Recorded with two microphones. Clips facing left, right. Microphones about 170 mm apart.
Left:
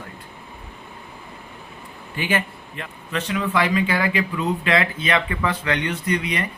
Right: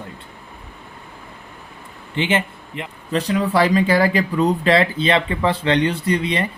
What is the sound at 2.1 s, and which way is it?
Speech, 25° right (ahead or behind).